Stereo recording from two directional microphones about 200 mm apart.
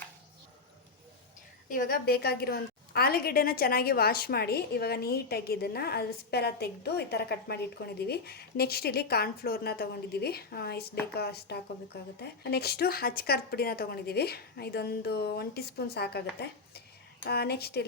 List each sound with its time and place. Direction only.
1.7 s a woman's voice: 45° left (ahead or behind)